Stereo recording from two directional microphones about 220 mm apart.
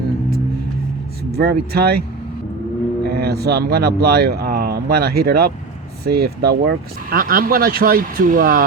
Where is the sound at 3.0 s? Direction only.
45° right (ahead or behind).